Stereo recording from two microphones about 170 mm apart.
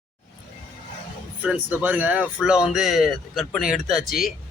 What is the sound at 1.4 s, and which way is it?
Speech, 10° right (ahead or behind).